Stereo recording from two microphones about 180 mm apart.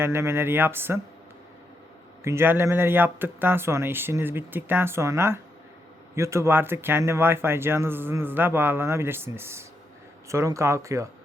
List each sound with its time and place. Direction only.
0.0 s speech: 15° right (ahead or behind)
2.2 s speech: 15° right (ahead or behind)